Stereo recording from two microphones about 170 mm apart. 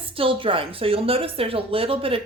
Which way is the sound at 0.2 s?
30° right (ahead or behind).